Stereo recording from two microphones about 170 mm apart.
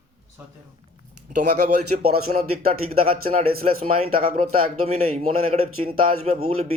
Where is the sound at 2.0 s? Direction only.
65° right (ahead or behind).